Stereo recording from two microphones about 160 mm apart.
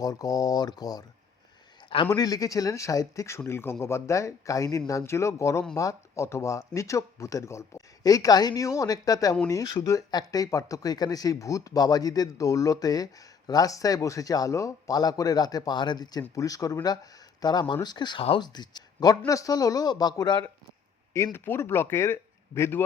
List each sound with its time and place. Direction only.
0.0 s speech: 20° left (ahead or behind)
2.1 s speech: 25° left (ahead or behind)
21.3 s speech: 15° left (ahead or behind)